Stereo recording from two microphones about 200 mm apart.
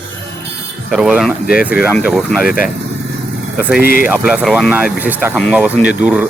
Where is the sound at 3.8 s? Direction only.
45° left (ahead or behind).